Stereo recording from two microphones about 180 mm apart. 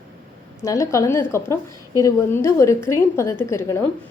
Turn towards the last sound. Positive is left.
turn(degrees=15)  # may be behind; listen again after turning